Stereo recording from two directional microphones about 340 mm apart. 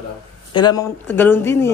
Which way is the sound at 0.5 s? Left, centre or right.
Centre.